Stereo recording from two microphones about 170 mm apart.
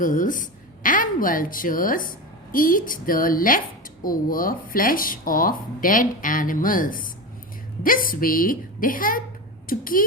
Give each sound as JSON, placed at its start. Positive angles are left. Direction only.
{"t": 0.0, "sound": "a woman's voice", "side_deg": 50}